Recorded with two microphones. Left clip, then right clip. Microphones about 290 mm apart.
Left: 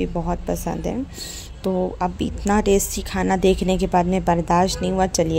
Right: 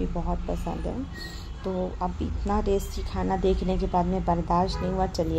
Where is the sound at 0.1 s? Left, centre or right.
Left.